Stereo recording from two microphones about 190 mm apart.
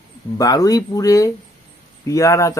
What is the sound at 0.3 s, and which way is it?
Speech, 20° left (ahead or behind).